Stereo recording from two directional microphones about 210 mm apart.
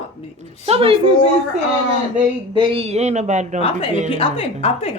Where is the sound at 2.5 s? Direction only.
25° right (ahead or behind).